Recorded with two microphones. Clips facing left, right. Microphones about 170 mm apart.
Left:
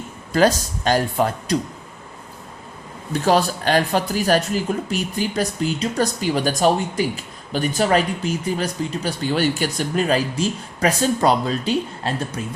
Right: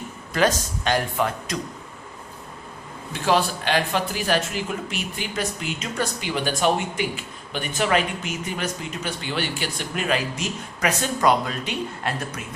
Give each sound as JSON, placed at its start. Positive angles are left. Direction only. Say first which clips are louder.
{"t": 0.3, "sound": "speech", "louder": "left 5 dB", "side_deg": 35}
{"t": 3.1, "sound": "speech", "louder": "left 4 dB", "side_deg": 40}